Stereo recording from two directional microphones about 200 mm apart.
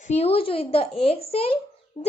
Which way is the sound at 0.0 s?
30° left (ahead or behind).